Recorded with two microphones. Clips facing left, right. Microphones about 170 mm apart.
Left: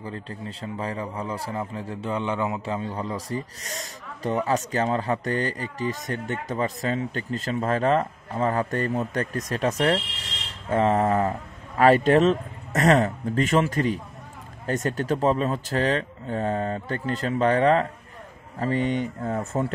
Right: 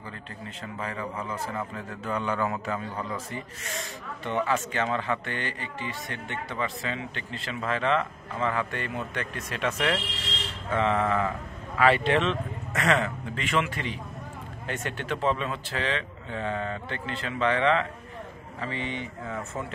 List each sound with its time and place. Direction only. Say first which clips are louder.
0.0 s speech: left 6 dB; 30° left (ahead or behind)